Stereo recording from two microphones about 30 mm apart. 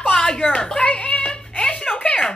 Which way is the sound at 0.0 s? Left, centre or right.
Left.